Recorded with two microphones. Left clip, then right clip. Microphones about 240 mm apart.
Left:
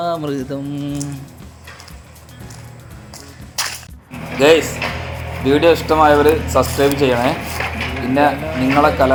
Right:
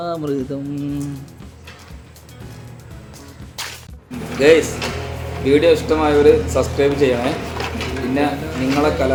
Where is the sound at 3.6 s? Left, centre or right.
Left.